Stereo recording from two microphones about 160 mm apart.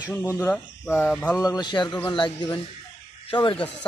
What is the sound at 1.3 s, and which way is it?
Speech, 25° left (ahead or behind).